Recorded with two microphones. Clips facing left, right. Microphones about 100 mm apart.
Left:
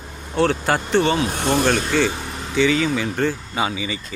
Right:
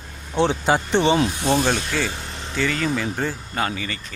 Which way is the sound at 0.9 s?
20° right (ahead or behind).